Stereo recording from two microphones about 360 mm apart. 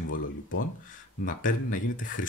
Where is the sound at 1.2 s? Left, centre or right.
Left.